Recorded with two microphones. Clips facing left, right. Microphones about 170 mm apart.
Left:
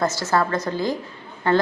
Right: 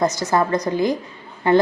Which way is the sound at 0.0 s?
15° right (ahead or behind).